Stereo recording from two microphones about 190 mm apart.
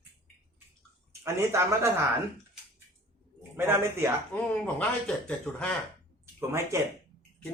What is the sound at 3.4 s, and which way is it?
Speech, 10° right (ahead or behind).